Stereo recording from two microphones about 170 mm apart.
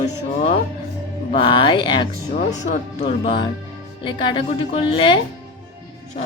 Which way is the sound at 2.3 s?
45° left (ahead or behind).